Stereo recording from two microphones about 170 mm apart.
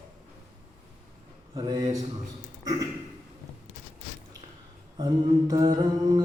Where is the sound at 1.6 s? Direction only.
20° right (ahead or behind).